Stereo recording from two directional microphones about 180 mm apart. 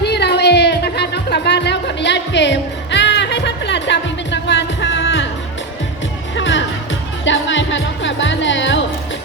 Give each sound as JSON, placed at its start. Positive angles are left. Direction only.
{"t": 0.0, "sound": "music", "side_deg": 70}
{"t": 6.3, "sound": "music", "side_deg": 90}